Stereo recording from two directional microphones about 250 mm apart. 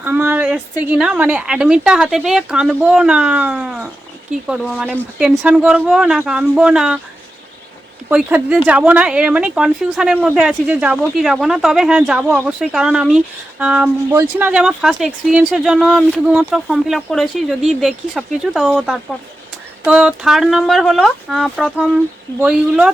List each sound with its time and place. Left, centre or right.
0.0 s speech: centre
8.1 s speech: centre